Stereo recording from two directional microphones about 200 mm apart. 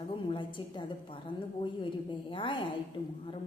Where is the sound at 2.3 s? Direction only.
25° left (ahead or behind).